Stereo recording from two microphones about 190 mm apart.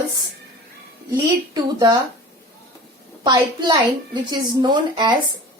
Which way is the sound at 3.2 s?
25° right (ahead or behind).